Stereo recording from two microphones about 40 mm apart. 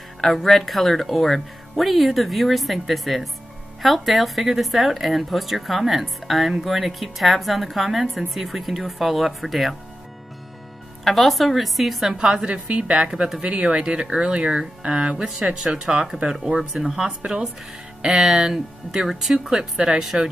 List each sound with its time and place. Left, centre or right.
0.2 s speech: centre
11.1 s speech: centre
12.2 s speech: centre
13.4 s speech: right
18.0 s speech: centre
19.5 s speech: right